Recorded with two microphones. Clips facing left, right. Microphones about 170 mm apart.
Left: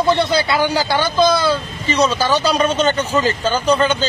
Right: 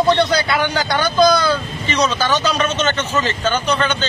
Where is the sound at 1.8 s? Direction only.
30° left (ahead or behind).